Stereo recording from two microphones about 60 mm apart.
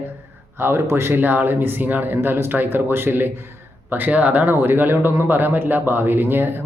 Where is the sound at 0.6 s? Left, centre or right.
Right.